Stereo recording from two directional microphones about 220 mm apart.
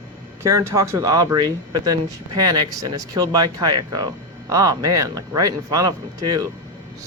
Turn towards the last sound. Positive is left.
turn(degrees=-15)  # may be behind; listen again after turning